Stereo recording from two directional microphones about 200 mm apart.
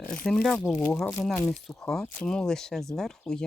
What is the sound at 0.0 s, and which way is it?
Speech, 5° left (ahead or behind).